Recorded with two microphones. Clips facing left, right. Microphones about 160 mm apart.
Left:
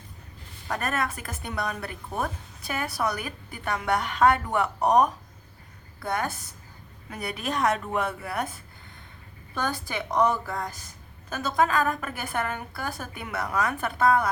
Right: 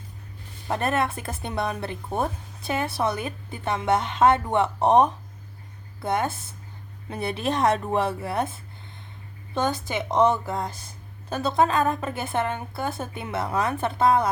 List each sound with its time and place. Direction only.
0.7 s speech: 30° right (ahead or behind)